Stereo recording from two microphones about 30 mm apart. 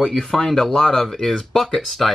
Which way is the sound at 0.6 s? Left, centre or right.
Left.